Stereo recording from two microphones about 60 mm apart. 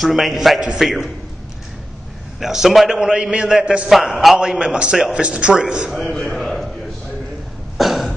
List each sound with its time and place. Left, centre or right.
0.0 s a man's voice: centre
2.4 s a man's voice: centre
3.0 s a man's voice: centre
3.9 s a man's voice: centre
4.4 s a man's voice: centre
5.9 s a man's voice: centre
7.7 s cough: centre